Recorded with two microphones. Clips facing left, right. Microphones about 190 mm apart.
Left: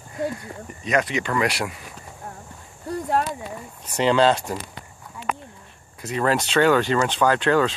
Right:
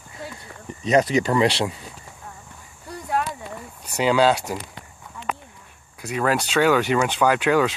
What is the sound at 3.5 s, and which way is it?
Speech, 5° right (ahead or behind).